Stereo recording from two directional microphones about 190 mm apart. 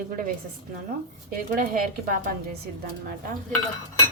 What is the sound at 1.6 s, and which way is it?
Speech, 50° right (ahead or behind).